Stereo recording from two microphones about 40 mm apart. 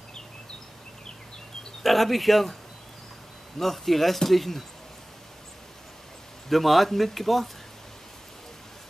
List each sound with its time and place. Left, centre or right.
1.8 s speech: centre
3.5 s speech: centre
6.5 s speech: centre